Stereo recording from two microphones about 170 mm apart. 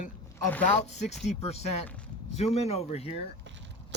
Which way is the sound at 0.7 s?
40° left (ahead or behind).